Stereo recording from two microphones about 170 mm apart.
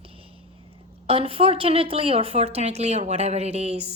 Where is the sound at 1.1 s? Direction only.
35° right (ahead or behind).